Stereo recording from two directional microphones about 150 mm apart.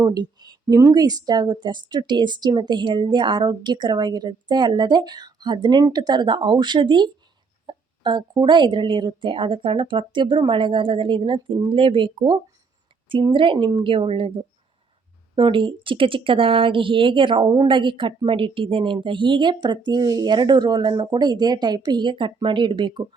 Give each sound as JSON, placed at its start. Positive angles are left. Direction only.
{"t": 0.0, "sound": "a woman's voice", "side_deg": -25}